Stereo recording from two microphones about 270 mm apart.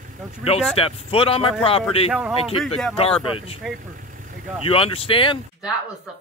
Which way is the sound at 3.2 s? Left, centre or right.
Centre.